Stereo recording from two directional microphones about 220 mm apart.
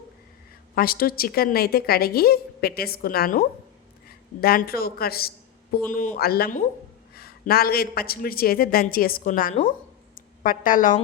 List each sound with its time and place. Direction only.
0.8 s a woman's voice: 40° left (ahead or behind)